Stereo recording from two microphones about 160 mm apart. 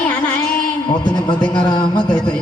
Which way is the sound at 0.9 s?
30° left (ahead or behind).